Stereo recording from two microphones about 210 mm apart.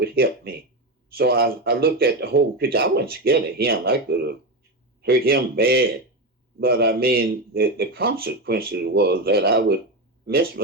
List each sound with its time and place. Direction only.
0.0 s speech: 45° right (ahead or behind)